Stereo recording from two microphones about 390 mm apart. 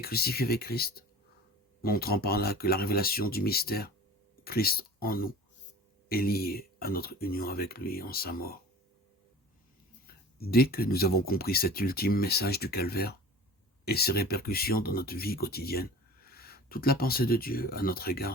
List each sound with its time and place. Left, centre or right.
0.0 s speech: left
10.3 s speech: left